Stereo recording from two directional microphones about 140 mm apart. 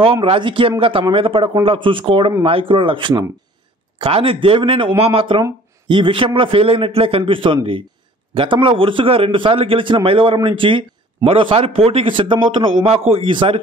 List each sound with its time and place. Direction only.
0.2 s a man's voice: 40° right (ahead or behind)